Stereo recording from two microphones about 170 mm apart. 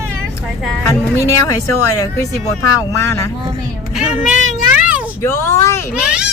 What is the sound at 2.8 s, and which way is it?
Speech, 20° left (ahead or behind).